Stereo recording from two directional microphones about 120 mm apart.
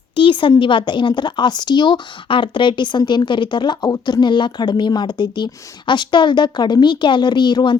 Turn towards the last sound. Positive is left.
turn(degrees=40)  # may be behind; listen again after turning